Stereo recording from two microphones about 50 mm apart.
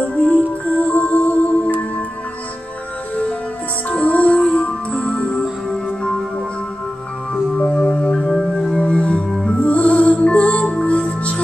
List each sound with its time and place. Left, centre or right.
0.1 s music: left
3.9 s music: left
7.5 s music: left
8.3 s music: centre
8.7 s music: left
9.3 s music: centre
9.6 s music: left